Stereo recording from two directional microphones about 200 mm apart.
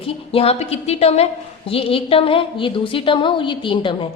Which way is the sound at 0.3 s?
30° left (ahead or behind).